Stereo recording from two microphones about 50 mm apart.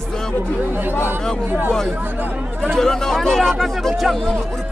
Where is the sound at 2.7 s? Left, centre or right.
Centre.